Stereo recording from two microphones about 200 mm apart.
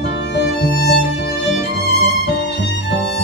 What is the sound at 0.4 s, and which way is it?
Music, 55° left (ahead or behind).